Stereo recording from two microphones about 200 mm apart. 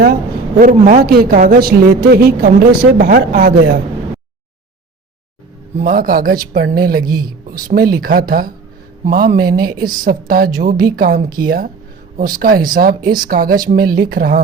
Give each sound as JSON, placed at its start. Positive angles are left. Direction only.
{"t": 0.6, "sound": "a woman's voice", "side_deg": -40}
{"t": 5.7, "sound": "a woman's voice", "side_deg": -45}